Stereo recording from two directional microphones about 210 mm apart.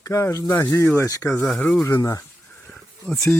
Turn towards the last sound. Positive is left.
turn(degrees=0)  # may be behind; listen again after turning